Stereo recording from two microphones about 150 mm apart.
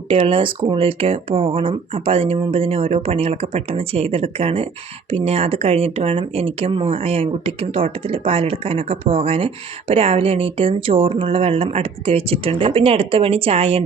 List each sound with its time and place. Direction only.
0.1 s speech: 35° right (ahead or behind)